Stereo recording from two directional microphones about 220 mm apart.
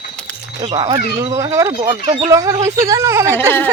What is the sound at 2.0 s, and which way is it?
Speech, 25° right (ahead or behind).